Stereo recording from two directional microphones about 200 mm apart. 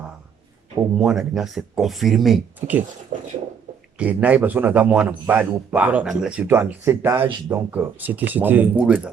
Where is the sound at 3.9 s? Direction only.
5° right (ahead or behind).